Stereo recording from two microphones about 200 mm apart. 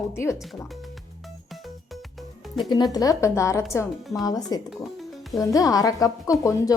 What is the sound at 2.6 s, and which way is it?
Speech, 20° left (ahead or behind).